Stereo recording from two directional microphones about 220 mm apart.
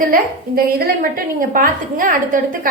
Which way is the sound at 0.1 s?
40° right (ahead or behind).